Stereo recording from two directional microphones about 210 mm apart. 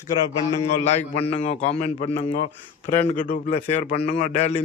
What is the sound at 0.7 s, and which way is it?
A man's voice, 30° left (ahead or behind).